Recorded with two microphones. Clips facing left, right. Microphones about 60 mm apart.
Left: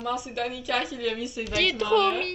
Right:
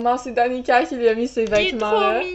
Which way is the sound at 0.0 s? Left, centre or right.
Right.